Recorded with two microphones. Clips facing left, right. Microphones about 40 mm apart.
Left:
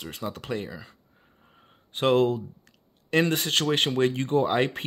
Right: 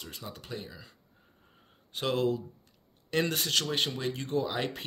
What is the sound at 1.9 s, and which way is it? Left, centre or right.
Speech, left.